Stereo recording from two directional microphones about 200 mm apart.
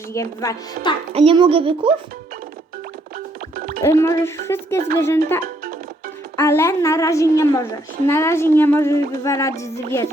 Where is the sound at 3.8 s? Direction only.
15° left (ahead or behind).